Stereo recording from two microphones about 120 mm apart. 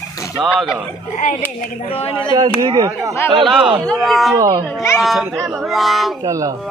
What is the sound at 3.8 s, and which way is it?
Speech, centre (ahead or behind).